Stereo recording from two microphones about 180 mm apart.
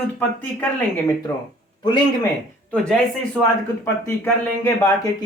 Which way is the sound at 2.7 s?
5° left (ahead or behind).